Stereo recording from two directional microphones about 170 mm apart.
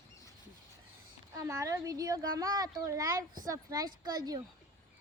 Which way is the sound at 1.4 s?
20° right (ahead or behind).